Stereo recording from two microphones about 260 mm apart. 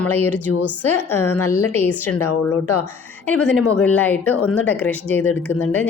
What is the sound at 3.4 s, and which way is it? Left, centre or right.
Speech, centre.